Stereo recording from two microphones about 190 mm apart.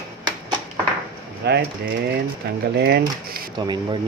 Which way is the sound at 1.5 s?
60° right (ahead or behind).